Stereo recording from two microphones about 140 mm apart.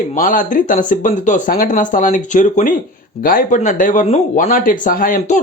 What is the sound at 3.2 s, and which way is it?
Speech, 90° left.